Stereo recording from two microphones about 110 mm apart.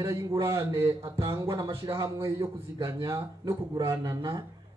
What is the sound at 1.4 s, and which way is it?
A man's voice, 30° right (ahead or behind).